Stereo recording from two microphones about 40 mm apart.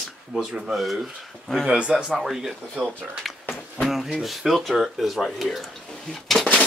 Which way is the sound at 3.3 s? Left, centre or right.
Centre.